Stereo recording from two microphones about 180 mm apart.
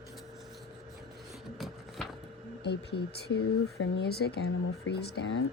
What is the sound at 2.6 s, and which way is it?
Speech, 70° left (ahead or behind).